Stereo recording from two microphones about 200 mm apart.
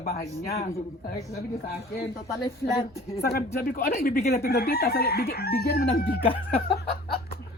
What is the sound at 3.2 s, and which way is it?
Speech, 50° left (ahead or behind).